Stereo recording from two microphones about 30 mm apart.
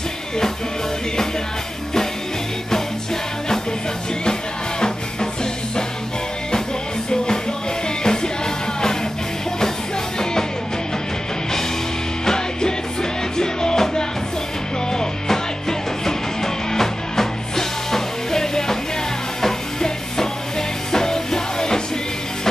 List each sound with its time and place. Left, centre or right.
4.2 s music: left
13.4 s music: left
16.7 s music: centre
20.9 s music: centre